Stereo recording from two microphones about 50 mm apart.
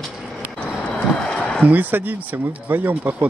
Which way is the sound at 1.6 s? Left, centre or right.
Right.